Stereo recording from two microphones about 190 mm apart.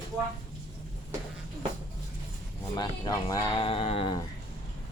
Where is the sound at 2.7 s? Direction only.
20° left (ahead or behind).